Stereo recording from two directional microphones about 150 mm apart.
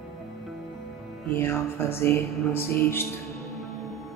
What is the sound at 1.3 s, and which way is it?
Music, 15° left (ahead or behind).